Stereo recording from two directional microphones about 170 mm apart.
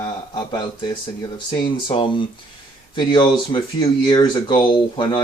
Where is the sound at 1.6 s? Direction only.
30° left (ahead or behind).